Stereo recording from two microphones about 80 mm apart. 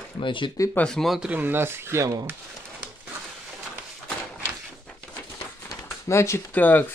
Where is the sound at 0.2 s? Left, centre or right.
Left.